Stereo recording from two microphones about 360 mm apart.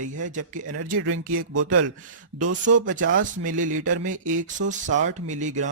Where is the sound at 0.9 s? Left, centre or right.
Right.